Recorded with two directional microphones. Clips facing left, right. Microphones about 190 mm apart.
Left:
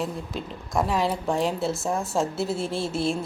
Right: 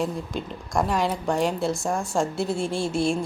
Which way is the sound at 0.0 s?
Centre (ahead or behind).